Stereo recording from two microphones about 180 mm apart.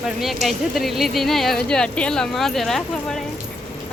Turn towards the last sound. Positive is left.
turn(degrees=5)  # may be behind; listen again after turning